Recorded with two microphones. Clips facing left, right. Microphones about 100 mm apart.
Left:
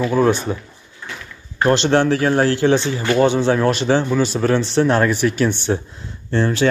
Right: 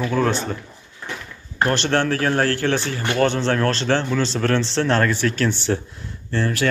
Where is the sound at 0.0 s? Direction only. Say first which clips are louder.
Left 4 dB; 15° left (ahead or behind).